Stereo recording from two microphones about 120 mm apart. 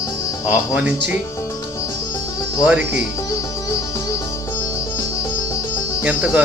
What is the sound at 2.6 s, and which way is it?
Speech, 10° right (ahead or behind).